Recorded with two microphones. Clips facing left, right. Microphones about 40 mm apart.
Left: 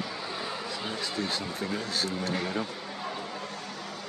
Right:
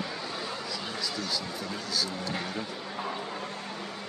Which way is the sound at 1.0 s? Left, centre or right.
Left.